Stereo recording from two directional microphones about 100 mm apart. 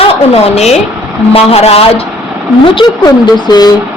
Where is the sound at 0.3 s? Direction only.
90° left.